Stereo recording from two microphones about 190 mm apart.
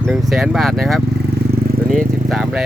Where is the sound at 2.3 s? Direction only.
5° right (ahead or behind).